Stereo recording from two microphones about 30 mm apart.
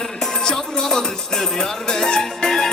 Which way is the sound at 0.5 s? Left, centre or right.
Centre.